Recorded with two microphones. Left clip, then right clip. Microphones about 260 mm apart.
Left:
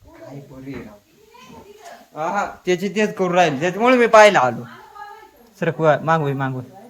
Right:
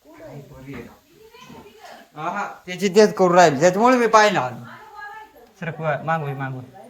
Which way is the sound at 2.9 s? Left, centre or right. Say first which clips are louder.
Right 6 dB; centre.